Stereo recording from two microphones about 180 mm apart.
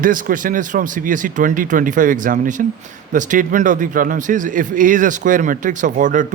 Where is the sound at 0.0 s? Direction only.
50° right (ahead or behind).